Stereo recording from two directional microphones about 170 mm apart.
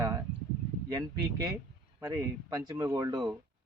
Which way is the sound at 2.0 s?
20° right (ahead or behind).